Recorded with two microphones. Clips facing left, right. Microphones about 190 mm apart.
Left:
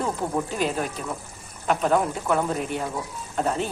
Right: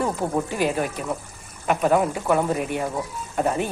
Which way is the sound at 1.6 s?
10° right (ahead or behind).